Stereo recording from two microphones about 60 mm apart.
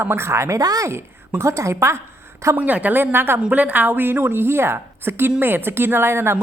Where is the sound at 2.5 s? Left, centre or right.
Right.